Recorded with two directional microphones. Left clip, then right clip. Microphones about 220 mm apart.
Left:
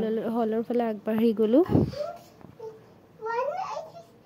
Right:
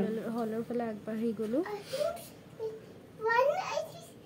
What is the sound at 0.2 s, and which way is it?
Speech, 35° left (ahead or behind).